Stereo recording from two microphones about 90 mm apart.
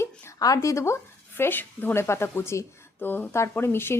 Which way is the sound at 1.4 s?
20° left (ahead or behind).